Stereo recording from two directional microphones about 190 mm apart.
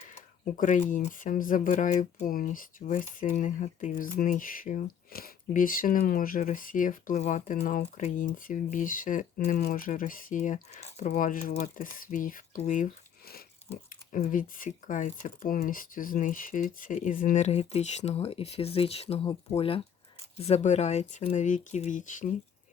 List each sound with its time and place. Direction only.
0.5 s speech: 40° left (ahead or behind)